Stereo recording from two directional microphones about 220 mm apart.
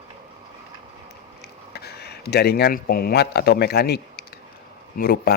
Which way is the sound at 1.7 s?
45° left (ahead or behind).